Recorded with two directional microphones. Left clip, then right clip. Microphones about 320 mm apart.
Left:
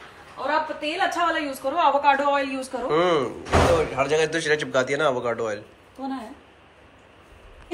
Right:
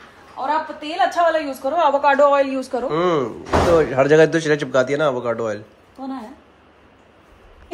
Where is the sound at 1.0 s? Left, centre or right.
Right.